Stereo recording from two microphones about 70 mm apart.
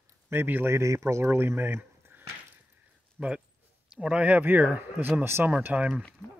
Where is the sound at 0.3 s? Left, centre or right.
Right.